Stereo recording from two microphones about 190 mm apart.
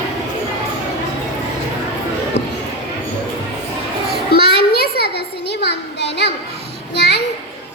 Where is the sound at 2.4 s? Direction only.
65° left (ahead or behind).